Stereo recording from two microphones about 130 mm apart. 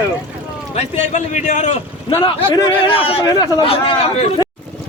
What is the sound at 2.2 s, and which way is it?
Speech, 35° left (ahead or behind).